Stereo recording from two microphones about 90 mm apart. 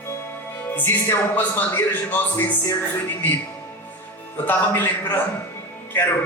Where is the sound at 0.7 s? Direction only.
25° left (ahead or behind).